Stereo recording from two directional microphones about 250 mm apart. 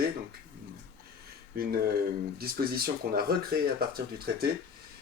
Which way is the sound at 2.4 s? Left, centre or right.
Right.